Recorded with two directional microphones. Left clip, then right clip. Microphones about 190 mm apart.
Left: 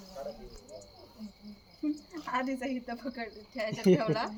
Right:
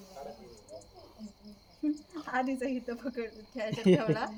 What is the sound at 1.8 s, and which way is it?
Speech, 5° right (ahead or behind).